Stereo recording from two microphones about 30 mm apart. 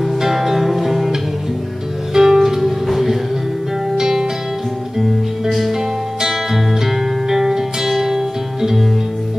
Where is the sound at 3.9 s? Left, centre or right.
Centre.